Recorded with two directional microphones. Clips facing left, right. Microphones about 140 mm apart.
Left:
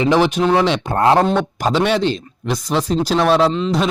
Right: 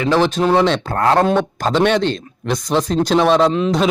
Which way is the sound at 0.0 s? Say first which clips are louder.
Left 1 dB; 15° left (ahead or behind).